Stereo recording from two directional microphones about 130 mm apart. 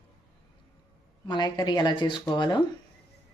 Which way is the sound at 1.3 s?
35° left (ahead or behind).